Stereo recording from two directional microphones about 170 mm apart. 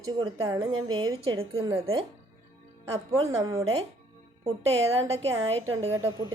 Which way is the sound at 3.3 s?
20° right (ahead or behind).